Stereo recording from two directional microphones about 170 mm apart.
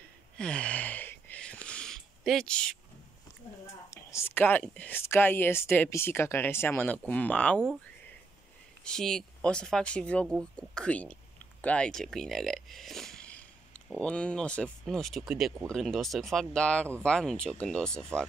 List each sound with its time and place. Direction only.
0.4 s a sound: 5° left (ahead or behind)
3.9 s speech: 15° left (ahead or behind)
8.8 s speech: 5° left (ahead or behind)